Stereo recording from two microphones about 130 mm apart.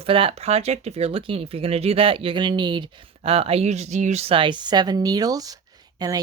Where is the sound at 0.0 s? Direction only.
45° right (ahead or behind).